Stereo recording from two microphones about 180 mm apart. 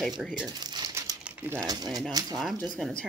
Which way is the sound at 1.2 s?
15° right (ahead or behind).